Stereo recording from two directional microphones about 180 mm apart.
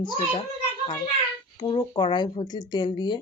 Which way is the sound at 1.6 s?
25° left (ahead or behind).